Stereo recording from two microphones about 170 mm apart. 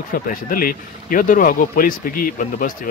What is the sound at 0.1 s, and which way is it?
Speech, 55° left (ahead or behind).